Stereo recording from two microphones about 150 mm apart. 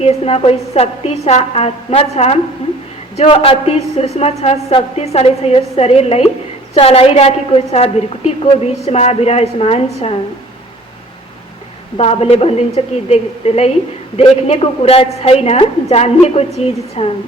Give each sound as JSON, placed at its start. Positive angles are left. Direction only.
{"t": 0.0, "sound": "a woman's voice", "side_deg": 40}
{"t": 11.9, "sound": "a woman's voice", "side_deg": 40}